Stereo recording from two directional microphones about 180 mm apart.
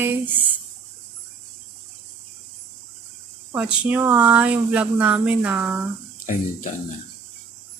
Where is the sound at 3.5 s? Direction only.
10° right (ahead or behind).